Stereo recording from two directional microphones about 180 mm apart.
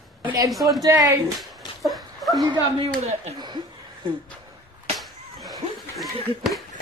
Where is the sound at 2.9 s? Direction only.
40° right (ahead or behind).